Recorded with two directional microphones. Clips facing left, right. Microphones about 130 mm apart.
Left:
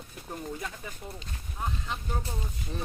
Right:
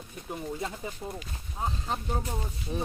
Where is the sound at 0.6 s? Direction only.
25° right (ahead or behind).